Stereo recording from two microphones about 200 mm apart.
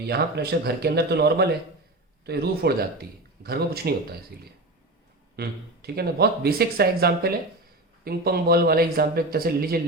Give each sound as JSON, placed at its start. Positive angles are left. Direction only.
{"t": 0.1, "sound": "speech", "side_deg": -55}
{"t": 5.4, "sound": "speech", "side_deg": -50}